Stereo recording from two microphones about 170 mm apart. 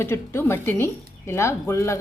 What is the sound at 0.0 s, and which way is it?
Speech, 15° left (ahead or behind).